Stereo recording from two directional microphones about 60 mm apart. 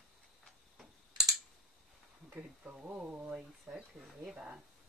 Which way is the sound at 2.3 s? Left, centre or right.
Centre.